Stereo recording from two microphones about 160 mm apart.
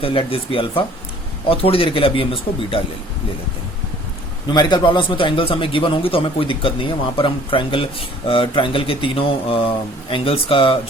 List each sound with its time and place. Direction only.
0.0 s a man's voice: 35° left (ahead or behind)
4.5 s a man's voice: 30° left (ahead or behind)